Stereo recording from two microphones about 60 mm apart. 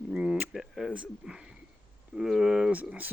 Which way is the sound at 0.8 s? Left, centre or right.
Centre.